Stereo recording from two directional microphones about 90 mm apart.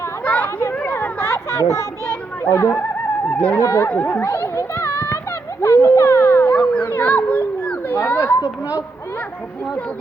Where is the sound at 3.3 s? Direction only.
15° left (ahead or behind).